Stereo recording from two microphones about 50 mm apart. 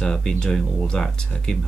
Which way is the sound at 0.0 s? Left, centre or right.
Centre.